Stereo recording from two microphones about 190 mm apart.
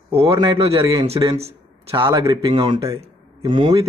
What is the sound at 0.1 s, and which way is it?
A man's voice, 30° right (ahead or behind).